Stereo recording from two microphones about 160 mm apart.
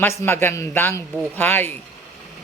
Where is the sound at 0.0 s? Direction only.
15° left (ahead or behind).